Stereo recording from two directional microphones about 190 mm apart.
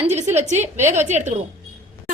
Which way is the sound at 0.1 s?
35° right (ahead or behind).